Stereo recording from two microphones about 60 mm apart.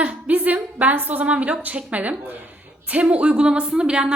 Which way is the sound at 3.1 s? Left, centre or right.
Centre.